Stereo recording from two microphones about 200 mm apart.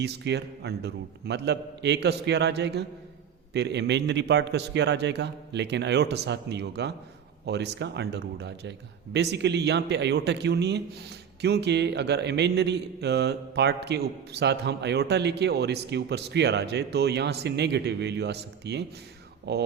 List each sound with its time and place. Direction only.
0.0 s a man's voice: 55° right (ahead or behind)